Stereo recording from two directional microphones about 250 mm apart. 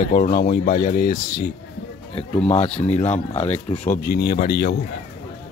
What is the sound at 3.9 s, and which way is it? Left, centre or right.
Speech, left.